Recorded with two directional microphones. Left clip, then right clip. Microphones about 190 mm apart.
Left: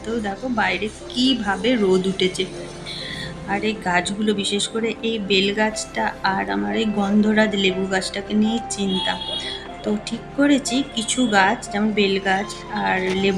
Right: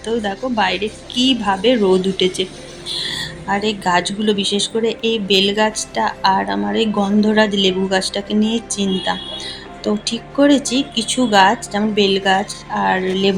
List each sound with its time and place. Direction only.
0.2 s a woman's voice: 10° right (ahead or behind)